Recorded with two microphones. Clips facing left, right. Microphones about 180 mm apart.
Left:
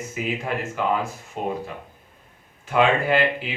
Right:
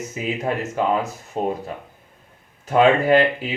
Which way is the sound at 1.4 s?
35° right (ahead or behind).